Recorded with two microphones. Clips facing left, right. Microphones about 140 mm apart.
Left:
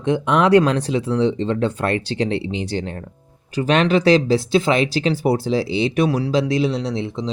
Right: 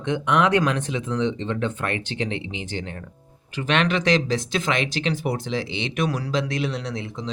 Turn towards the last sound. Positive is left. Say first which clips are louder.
# left 7 dB
turn(degrees=30)  # may be behind; listen again after turning